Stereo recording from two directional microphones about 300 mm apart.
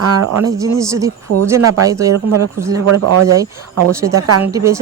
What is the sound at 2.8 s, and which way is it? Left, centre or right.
Speech, right.